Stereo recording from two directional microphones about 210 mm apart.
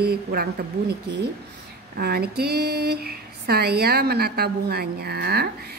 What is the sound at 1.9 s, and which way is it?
Speech, 50° right (ahead or behind).